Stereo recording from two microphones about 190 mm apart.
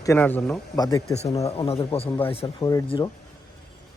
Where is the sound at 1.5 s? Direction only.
30° left (ahead or behind).